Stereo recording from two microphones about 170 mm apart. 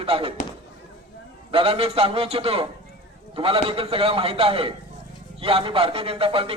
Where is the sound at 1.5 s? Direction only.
35° right (ahead or behind).